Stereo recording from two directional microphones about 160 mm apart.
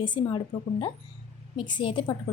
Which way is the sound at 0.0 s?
25° left (ahead or behind).